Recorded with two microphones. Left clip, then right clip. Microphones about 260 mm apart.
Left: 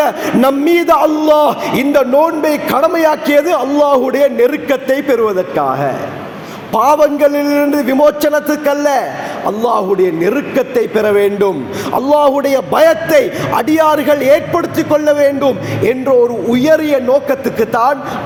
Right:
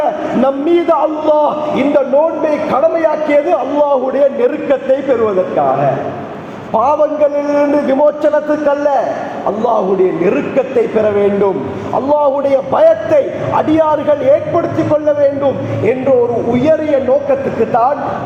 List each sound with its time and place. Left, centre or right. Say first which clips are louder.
0.0 s a man's voice: left 2 dB; left
6.7 s a man's voice: left 2 dB; left
10.2 s a man's voice: right 1 dB; left